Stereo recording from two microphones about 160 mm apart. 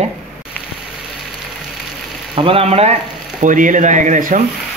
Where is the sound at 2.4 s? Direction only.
35° right (ahead or behind).